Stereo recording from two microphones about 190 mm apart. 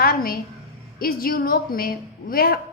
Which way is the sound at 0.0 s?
50° left (ahead or behind).